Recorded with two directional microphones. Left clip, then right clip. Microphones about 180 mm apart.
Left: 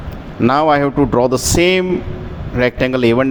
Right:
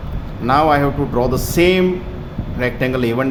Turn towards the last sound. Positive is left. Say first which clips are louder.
# left 4 dB
turn(degrees=45)  # may be behind; listen again after turning